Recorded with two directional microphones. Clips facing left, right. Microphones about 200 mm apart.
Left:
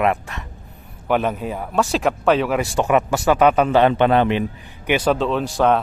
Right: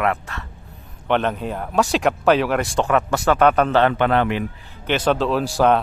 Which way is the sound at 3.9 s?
20° left (ahead or behind).